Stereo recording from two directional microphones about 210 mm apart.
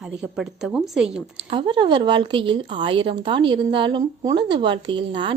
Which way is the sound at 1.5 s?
25° right (ahead or behind).